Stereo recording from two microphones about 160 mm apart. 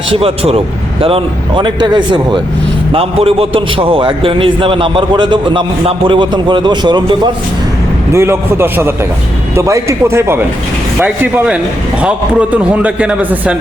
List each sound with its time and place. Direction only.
0.1 s a man's voice: 35° right (ahead or behind)
8.1 s a man's voice: 15° right (ahead or behind)